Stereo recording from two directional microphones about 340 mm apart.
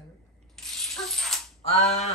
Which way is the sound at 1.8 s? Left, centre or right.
Centre.